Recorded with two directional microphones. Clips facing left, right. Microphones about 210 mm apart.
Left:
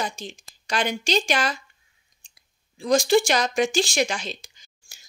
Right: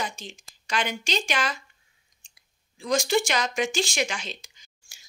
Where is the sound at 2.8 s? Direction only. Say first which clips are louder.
Left 5 dB; 35° left (ahead or behind).